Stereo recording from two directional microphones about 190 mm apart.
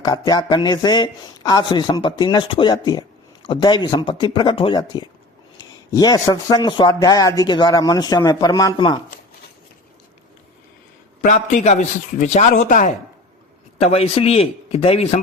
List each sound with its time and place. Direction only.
0.0 s a man's voice: 20° left (ahead or behind)
11.2 s a man's voice: 40° left (ahead or behind)
13.7 s a man's voice: 30° left (ahead or behind)